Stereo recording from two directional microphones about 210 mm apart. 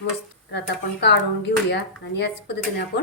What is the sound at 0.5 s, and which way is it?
Speech, 55° left (ahead or behind).